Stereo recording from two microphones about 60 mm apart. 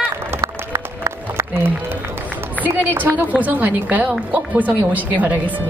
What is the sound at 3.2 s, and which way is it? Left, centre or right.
A woman's voice, right.